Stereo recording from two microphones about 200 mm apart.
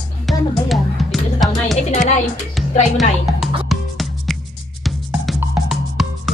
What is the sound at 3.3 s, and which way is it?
Music, centre (ahead or behind).